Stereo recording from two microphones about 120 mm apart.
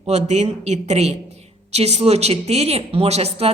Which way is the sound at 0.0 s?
65° right (ahead or behind).